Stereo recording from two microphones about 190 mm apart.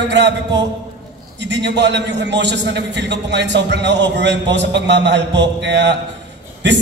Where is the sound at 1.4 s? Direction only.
65° right (ahead or behind).